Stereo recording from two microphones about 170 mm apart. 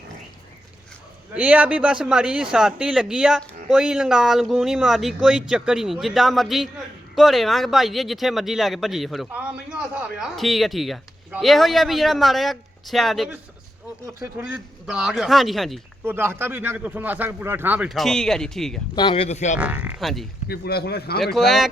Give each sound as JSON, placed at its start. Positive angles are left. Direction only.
{"t": 1.3, "sound": "a man's voice", "side_deg": -10}
{"t": 16.0, "sound": "a man's voice", "side_deg": -15}
{"t": 18.9, "sound": "speech", "side_deg": 30}
{"t": 19.5, "sound": "a man's voice", "side_deg": -10}
{"t": 20.5, "sound": "a man's voice", "side_deg": 65}
{"t": 21.3, "sound": "a man's voice", "side_deg": 0}